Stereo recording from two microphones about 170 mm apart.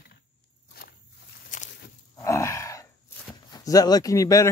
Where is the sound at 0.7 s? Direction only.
65° left (ahead or behind).